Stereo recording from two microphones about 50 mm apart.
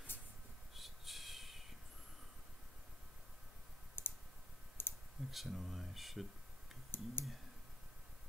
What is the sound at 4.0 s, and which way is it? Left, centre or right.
Clicking, left.